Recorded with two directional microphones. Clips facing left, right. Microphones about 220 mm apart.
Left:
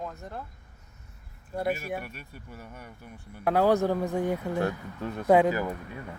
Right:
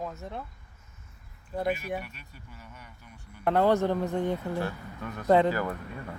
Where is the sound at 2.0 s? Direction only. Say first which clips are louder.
Left 3 dB; 50° left (ahead or behind).